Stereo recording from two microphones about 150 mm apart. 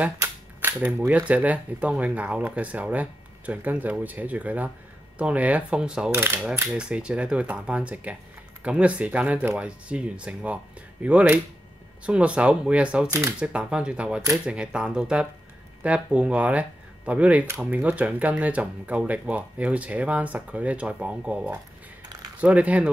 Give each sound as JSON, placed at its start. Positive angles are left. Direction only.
{"t": 0.0, "sound": "speech", "side_deg": -15}
{"t": 6.1, "sound": "speech", "side_deg": -15}